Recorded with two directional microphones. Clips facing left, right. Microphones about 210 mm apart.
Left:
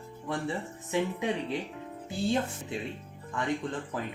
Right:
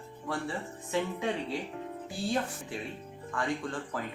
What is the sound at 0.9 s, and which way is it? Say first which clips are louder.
Speech: left 2 dB; 20° left (ahead or behind).